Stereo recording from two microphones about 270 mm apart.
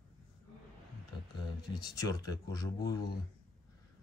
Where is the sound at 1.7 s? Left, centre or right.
Centre.